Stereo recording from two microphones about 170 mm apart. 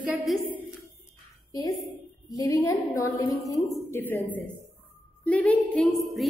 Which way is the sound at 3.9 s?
10° left (ahead or behind).